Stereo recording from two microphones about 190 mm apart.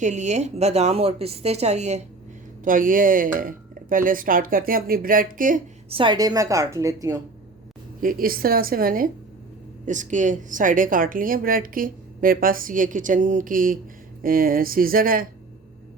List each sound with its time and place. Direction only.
0.0 s a woman's voice: 40° right (ahead or behind)
2.6 s speech: 45° right (ahead or behind)
5.9 s a woman's voice: 25° right (ahead or behind)
8.0 s speech: 50° right (ahead or behind)